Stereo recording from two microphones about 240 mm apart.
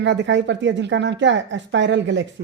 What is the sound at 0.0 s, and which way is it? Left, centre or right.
A woman's voice, right.